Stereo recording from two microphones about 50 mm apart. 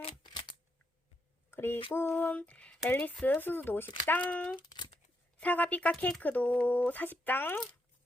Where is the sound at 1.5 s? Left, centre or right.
Left.